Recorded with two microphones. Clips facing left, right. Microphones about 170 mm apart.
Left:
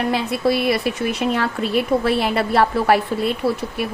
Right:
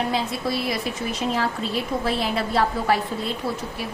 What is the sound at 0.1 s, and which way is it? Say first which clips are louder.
A woman's voice: left 6 dB; 65° left (ahead or behind).